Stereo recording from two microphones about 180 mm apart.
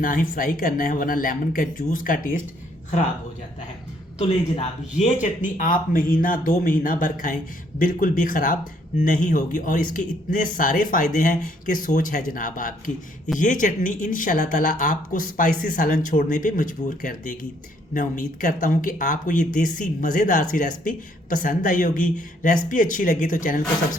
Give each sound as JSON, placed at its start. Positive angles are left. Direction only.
{"t": 0.0, "sound": "speech", "side_deg": 50}
{"t": 4.2, "sound": "speech", "side_deg": 35}